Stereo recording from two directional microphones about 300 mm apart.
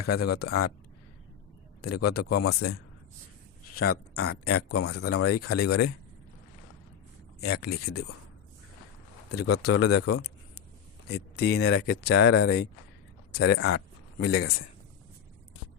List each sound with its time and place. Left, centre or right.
0.0 s speech: left
1.8 s speech: left
3.8 s speech: left
7.7 s speech: left
9.3 s speech: left
11.1 s speech: left
13.4 s speech: left